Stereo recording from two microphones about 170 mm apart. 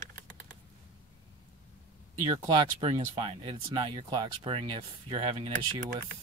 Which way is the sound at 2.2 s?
25° right (ahead or behind).